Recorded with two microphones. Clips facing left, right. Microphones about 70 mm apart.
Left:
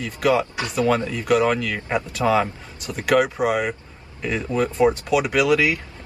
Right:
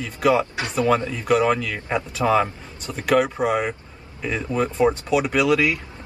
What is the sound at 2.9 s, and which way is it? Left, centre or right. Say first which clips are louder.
Speech: left 1 dB; centre.